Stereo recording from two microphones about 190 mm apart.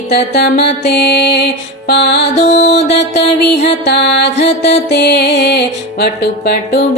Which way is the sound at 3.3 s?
60° left (ahead or behind).